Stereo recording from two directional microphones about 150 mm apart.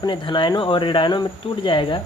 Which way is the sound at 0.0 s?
30° left (ahead or behind).